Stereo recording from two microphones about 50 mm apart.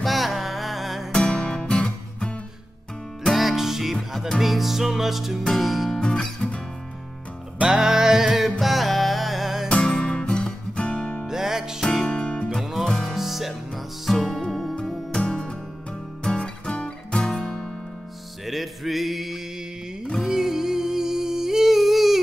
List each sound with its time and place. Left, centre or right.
0.0 s music: centre
1.1 s music: left
3.3 s music: centre
5.9 s music: centre
7.6 s music: centre
9.8 s music: centre
11.2 s music: centre
11.8 s music: centre
12.1 s music: left
12.4 s music: centre
12.8 s music: centre
13.1 s music: centre
15.1 s music: centre
18.4 s music: centre